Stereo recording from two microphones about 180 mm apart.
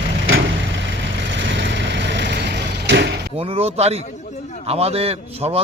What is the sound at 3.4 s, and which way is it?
A man's voice, 35° right (ahead or behind).